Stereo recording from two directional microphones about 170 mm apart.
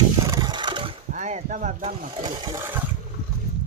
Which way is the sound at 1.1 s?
45° right (ahead or behind).